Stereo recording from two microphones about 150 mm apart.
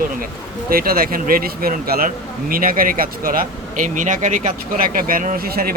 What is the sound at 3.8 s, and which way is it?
Speech, 60° right (ahead or behind).